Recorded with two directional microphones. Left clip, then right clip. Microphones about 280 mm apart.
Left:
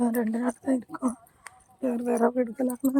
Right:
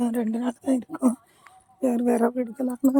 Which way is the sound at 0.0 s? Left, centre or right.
Centre.